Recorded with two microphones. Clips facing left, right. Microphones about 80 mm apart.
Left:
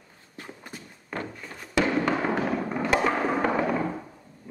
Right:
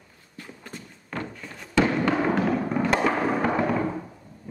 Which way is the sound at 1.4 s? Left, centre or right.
Centre.